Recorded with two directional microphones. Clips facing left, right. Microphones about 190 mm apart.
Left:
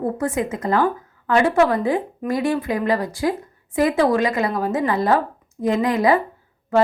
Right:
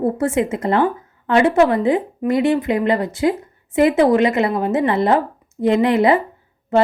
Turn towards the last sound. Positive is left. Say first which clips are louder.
# right 2 dB
turn(degrees=-25)  # may be behind; listen again after turning